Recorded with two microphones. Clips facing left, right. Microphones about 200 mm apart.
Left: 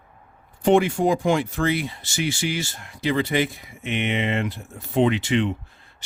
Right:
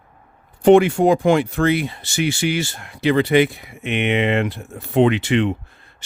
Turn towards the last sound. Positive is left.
turn(degrees=-65)  # may be behind; listen again after turning